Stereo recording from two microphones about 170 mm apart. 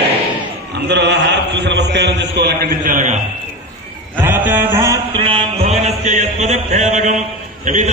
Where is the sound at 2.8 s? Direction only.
50° right (ahead or behind).